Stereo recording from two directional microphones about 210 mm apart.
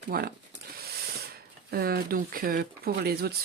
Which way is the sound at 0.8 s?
50° right (ahead or behind).